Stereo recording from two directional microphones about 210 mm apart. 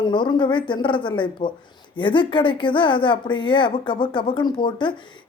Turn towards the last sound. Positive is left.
turn(degrees=20)  # may be behind; listen again after turning